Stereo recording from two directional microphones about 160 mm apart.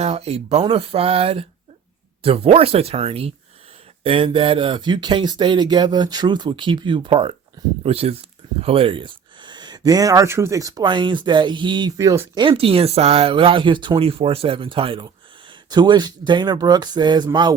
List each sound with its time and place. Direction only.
0.0 s speech: 40° right (ahead or behind); by 12.3 s 15° right (ahead or behind)
12.3 s speech: 30° right (ahead or behind)